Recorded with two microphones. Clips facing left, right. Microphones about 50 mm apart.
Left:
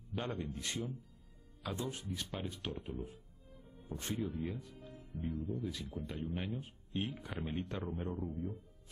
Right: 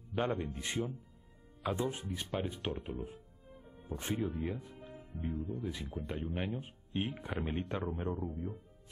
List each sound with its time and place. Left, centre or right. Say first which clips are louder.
0.1 s speech: right 6 dB; right
2.9 s music: right 2 dB; right
3.9 s speech: right 3 dB; right
4.4 s music: right 3 dB; right
5.3 s speech: right 1 dB; right
8.2 s speech: right 1 dB; centre